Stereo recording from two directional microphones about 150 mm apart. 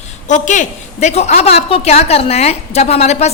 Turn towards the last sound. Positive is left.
turn(degrees=45)  # may be behind; listen again after turning